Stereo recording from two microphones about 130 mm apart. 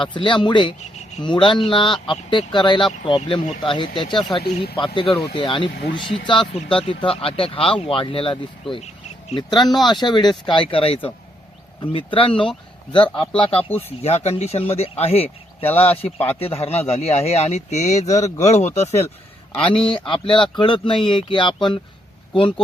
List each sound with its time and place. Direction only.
0.0 s speech: 40° left (ahead or behind)
14.0 s speech: 55° left (ahead or behind)
15.6 s speech: 15° left (ahead or behind)
16.0 s speech: 50° left (ahead or behind)
18.0 s speech: 25° left (ahead or behind)
18.3 s speech: 60° left (ahead or behind)
19.6 s speech: 40° left (ahead or behind)